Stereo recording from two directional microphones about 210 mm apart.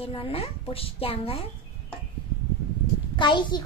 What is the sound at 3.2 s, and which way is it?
Speech, 20° left (ahead or behind).